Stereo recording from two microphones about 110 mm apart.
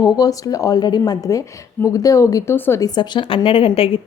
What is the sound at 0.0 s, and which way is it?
Speech, 35° left (ahead or behind).